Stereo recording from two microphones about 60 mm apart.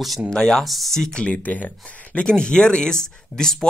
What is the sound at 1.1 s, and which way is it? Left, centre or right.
Speech, centre.